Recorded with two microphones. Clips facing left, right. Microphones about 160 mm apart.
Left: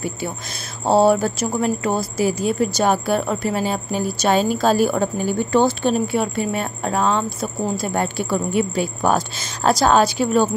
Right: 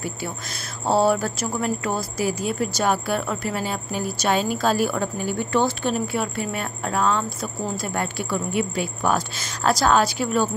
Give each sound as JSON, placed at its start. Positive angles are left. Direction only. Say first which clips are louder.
{"t": 0.8, "sound": "a woman's voice", "louder": "left 4 dB", "side_deg": 25}
{"t": 9.4, "sound": "a woman's voice", "louder": "left 3 dB", "side_deg": 20}